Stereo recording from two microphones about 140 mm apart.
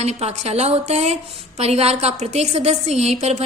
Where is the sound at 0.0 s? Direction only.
50° right (ahead or behind).